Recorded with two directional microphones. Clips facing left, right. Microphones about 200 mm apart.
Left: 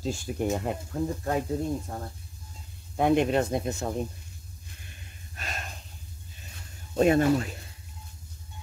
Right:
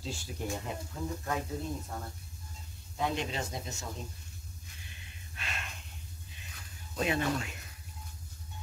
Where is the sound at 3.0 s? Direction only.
55° left (ahead or behind).